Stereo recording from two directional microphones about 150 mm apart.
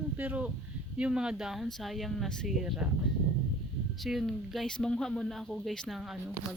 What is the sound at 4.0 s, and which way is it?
Speech, centre (ahead or behind).